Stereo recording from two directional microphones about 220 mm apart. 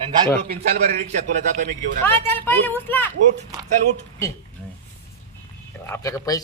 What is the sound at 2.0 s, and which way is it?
Speech, 10° left (ahead or behind).